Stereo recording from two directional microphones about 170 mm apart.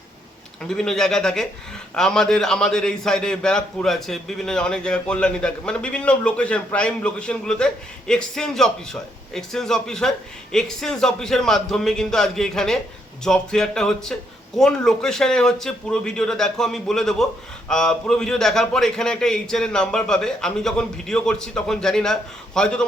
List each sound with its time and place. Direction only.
0.6 s a man's voice: 5° left (ahead or behind)